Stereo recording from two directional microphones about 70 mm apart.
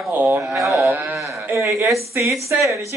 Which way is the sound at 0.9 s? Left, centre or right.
Right.